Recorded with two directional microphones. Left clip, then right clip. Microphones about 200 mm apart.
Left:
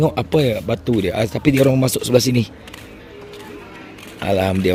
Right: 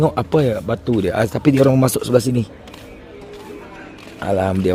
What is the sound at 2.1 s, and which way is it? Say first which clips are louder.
Speech: left 1 dB; 5° left (ahead or behind).